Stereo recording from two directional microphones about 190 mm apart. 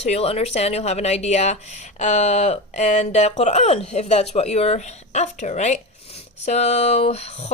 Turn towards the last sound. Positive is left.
turn(degrees=35)  # may be behind; listen again after turning